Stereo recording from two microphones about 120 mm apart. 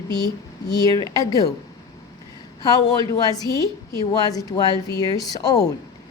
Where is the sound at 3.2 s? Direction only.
30° left (ahead or behind).